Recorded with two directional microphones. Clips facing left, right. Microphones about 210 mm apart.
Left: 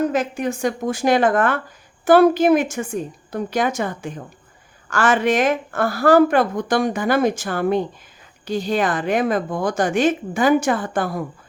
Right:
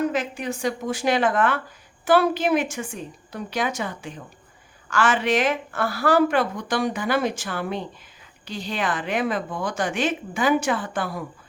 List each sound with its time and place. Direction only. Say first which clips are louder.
0.0 s speech: left 4 dB; 45° left (ahead or behind)